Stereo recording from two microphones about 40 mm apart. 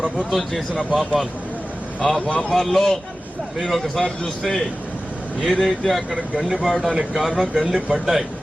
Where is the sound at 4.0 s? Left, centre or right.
Centre.